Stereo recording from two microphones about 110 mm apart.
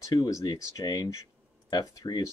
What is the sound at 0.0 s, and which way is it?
Speech, 35° left (ahead or behind).